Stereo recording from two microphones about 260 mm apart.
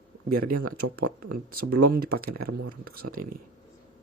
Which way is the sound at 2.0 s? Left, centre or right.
Right.